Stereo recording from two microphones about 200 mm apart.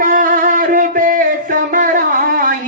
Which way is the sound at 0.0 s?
40° right (ahead or behind).